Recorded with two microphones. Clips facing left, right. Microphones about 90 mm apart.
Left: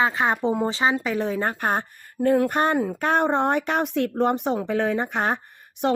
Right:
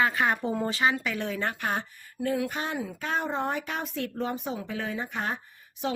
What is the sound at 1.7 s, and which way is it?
Speech, 55° left (ahead or behind).